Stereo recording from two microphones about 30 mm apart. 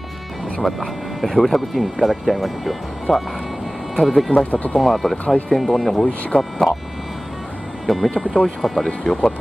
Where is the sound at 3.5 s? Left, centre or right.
Centre.